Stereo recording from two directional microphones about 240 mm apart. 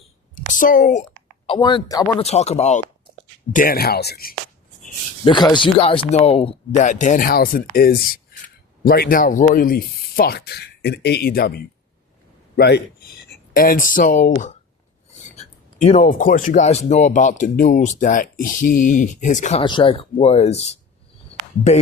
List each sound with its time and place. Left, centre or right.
0.3 s a woman's voice: left
1.5 s speech: centre; by 4.4 s left
5.2 s speech: centre
15.8 s speech: left